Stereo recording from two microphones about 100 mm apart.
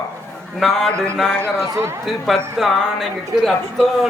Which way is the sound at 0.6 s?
Centre (ahead or behind).